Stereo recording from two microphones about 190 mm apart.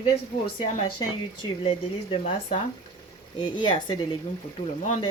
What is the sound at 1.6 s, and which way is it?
Speech, 30° left (ahead or behind).